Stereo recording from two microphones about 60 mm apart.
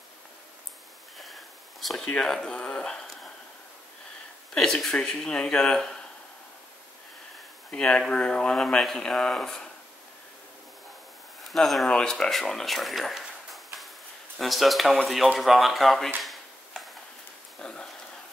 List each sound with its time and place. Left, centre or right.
1.1 s a sound: centre
2.0 s speech: centre
4.6 s speech: centre
7.7 s speech: centre
11.4 s speech: centre
16.2 s a sound: centre
17.6 s dog: centre